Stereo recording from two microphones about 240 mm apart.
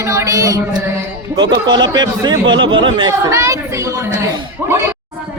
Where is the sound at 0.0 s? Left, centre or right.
Centre.